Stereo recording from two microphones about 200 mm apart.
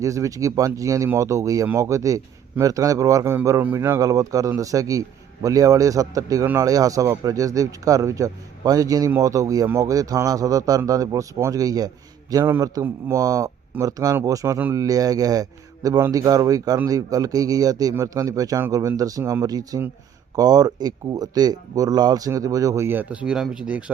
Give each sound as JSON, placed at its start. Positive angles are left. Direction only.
{"t": 0.0, "sound": "speech", "side_deg": -15}